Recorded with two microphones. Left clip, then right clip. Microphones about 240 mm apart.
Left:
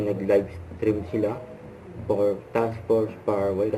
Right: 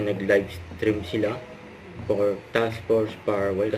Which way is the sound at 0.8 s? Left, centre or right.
Centre.